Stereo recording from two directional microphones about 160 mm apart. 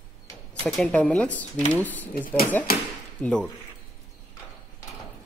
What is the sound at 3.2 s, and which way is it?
Speech, 5° left (ahead or behind).